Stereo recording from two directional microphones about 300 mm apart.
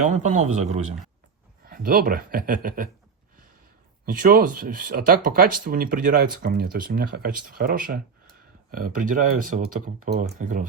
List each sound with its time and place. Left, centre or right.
0.0 s speech: right
4.0 s speech: right